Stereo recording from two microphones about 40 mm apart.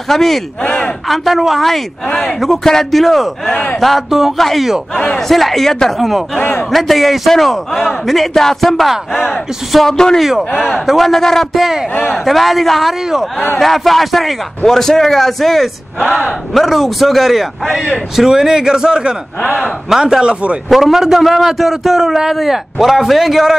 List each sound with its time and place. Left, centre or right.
0.1 s a man's voice: centre
4.9 s speech: left
5.3 s speech: centre
5.9 s a man's voice: centre
9.8 s speech: centre
10.6 s a man's voice: centre
19.4 s speech: centre
20.0 s speech: centre
20.7 s a man's voice: centre